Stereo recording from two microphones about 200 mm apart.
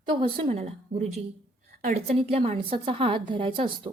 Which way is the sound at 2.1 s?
30° right (ahead or behind).